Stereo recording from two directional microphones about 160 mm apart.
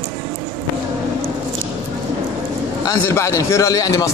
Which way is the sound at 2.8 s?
20° left (ahead or behind).